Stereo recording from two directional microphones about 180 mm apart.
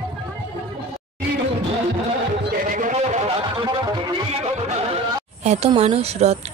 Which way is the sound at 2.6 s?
45° right (ahead or behind).